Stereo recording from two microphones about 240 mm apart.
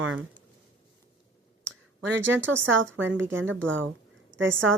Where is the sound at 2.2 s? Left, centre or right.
Right.